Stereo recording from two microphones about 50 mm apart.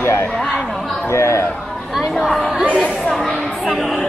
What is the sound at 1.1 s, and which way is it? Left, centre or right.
Speech, left.